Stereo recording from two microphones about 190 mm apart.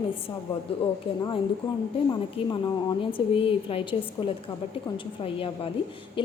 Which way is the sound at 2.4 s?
30° left (ahead or behind).